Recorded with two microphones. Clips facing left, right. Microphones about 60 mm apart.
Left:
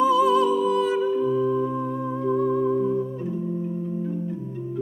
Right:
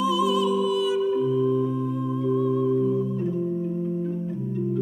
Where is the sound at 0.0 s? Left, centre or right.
Left.